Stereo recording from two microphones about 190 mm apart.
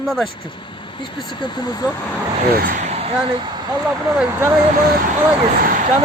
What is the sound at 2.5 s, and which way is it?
Speech, 45° right (ahead or behind).